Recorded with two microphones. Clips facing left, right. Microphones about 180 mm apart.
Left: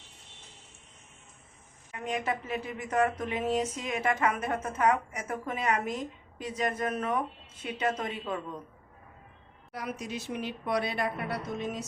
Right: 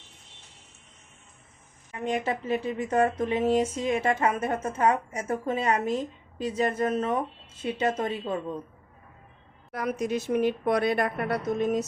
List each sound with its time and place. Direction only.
1.9 s speech: 30° right (ahead or behind)
9.7 s a woman's voice: 50° right (ahead or behind)